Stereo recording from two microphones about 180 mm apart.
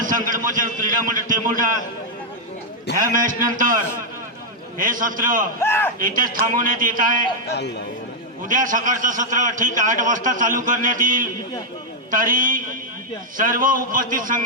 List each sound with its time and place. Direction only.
0.0 s a man's voice: 50° right (ahead or behind)
2.9 s a man's voice: 50° right (ahead or behind)
4.8 s a man's voice: 50° right (ahead or behind)
5.5 s a man's voice: 15° left (ahead or behind)
6.0 s a man's voice: 50° right (ahead or behind)
7.4 s speech: 70° left (ahead or behind)
8.4 s a man's voice: 45° right (ahead or behind)